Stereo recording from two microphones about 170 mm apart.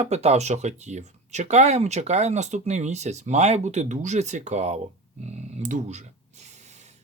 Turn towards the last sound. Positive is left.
turn(degrees=-45)  # may be behind; listen again after turning